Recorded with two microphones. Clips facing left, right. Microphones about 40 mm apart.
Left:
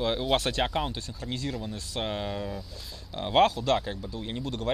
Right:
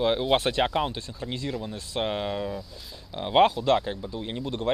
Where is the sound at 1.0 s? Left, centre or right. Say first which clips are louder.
Right 1 dB; right; by 3.4 s centre.